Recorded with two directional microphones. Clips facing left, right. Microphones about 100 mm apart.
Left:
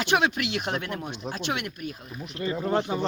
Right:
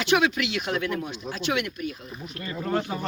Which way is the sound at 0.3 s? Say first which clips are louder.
Right 1 dB; 45° left (ahead or behind).